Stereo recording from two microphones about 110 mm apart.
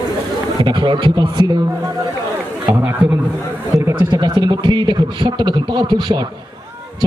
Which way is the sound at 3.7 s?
25° right (ahead or behind).